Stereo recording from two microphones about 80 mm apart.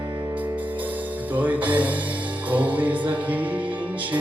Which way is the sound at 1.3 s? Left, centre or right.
Right.